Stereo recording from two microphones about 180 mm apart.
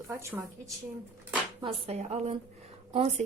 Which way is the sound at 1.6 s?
35° right (ahead or behind).